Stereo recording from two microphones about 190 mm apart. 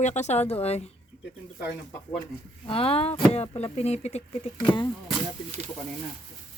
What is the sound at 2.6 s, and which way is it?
Speech, 30° left (ahead or behind).